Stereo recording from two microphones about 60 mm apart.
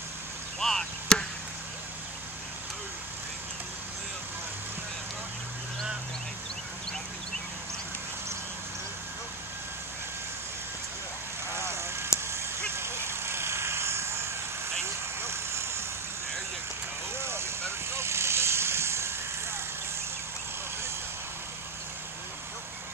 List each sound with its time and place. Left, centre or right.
0.6 s chop: centre
11.5 s vehicle: right
17.1 s vehicle: right